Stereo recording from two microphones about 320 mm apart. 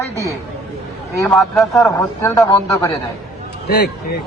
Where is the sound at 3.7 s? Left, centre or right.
Left.